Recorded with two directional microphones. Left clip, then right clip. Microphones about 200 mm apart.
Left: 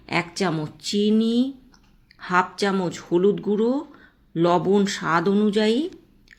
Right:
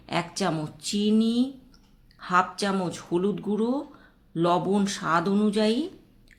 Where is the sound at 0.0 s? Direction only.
15° left (ahead or behind).